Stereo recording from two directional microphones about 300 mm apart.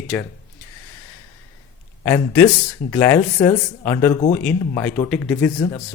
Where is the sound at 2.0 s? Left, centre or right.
Centre.